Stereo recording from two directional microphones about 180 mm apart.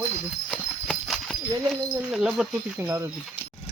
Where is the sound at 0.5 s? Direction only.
Centre (ahead or behind); by 3.1 s 15° right (ahead or behind).